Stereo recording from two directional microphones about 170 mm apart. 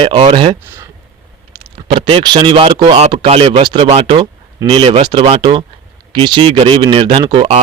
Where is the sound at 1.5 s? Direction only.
30° right (ahead or behind).